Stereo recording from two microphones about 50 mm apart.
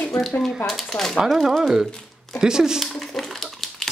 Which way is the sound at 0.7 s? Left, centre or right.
Centre.